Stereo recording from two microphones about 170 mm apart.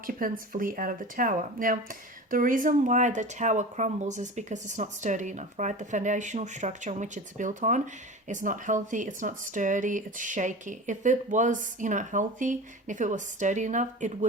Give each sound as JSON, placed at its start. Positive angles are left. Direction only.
{"t": 0.0, "sound": "speech", "side_deg": -55}